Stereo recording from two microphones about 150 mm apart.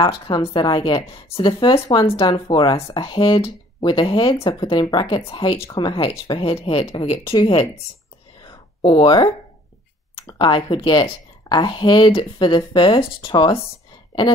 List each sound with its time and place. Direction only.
0.3 s speech: 35° left (ahead or behind)
8.4 s a sound: 30° left (ahead or behind)
10.2 s speech: 30° left (ahead or behind)